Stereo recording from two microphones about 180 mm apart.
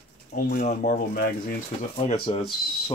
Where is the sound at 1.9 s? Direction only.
35° left (ahead or behind).